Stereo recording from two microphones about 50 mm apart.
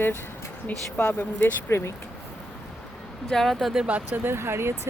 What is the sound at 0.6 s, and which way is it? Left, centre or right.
Speech, left.